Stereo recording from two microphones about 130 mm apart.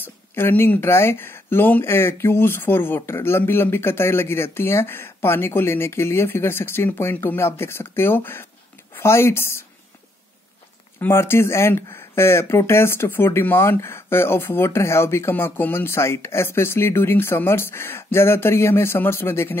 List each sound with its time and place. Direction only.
0.0 s speech: 15° left (ahead or behind)
11.0 s speech: 20° left (ahead or behind)